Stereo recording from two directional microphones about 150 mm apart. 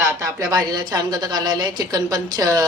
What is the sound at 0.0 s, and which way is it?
A woman's voice, 20° right (ahead or behind).